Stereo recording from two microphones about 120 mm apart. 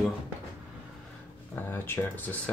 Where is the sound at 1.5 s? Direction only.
20° left (ahead or behind).